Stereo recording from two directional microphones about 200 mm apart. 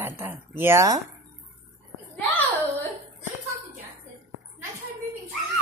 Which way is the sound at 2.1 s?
5° left (ahead or behind).